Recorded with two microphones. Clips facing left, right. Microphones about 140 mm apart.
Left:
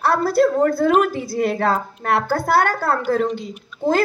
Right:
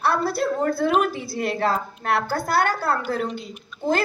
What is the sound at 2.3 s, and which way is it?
A woman's voice, 50° left (ahead or behind).